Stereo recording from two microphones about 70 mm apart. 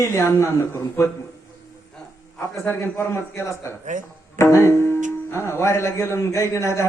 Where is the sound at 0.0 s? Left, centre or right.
Left.